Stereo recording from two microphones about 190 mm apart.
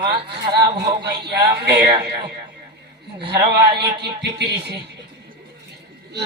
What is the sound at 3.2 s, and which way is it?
Speech, 60° right (ahead or behind).